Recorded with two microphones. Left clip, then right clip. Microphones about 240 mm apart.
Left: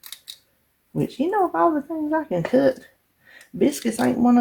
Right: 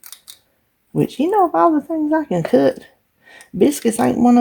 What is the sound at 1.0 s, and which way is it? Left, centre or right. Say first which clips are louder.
Speech: right 6 dB; right.